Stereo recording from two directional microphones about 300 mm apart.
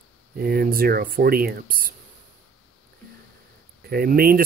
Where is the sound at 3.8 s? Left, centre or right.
Right.